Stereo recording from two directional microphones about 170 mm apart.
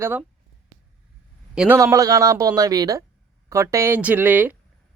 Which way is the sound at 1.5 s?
10° right (ahead or behind).